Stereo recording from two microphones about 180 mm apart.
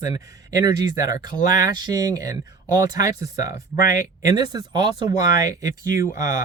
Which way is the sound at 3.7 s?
50° left (ahead or behind).